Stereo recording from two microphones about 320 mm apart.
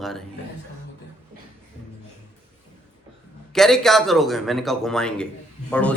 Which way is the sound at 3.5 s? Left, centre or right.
Centre.